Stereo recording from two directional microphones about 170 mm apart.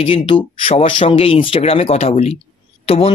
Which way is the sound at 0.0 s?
30° left (ahead or behind).